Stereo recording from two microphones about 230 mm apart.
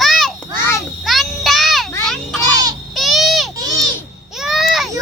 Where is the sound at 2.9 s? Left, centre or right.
Centre.